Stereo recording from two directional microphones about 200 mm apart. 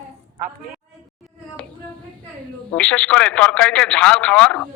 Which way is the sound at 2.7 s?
5° left (ahead or behind).